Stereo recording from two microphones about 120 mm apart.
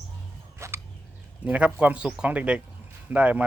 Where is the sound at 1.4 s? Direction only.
10° right (ahead or behind).